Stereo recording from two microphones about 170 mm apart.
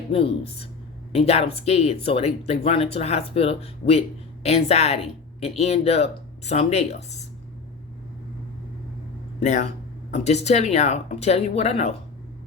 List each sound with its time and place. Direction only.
0.1 s speech: 35° left (ahead or behind)
9.4 s speech: 45° left (ahead or behind)